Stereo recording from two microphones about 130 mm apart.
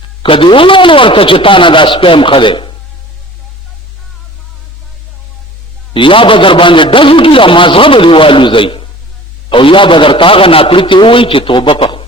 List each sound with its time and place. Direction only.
0.2 s a man's voice: 40° left (ahead or behind)
5.9 s a man's voice: 40° left (ahead or behind)